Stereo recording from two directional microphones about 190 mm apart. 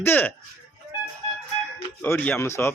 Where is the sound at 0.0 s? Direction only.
10° left (ahead or behind).